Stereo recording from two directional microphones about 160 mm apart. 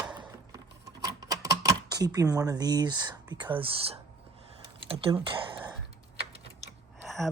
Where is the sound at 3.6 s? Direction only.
35° right (ahead or behind).